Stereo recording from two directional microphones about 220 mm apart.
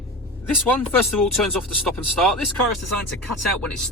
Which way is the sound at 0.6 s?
5° left (ahead or behind).